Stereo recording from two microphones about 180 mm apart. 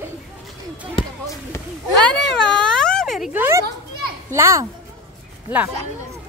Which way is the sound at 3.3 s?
15° right (ahead or behind).